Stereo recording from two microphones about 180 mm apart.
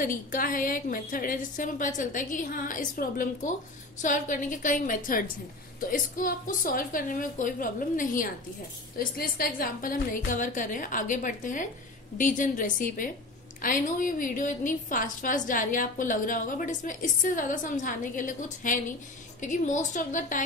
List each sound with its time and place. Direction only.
0.0 s a woman's voice: 50° left (ahead or behind)